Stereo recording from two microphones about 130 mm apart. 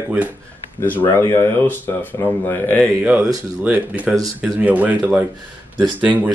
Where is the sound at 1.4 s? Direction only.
20° left (ahead or behind).